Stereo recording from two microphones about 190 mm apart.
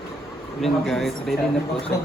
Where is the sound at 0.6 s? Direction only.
Centre (ahead or behind).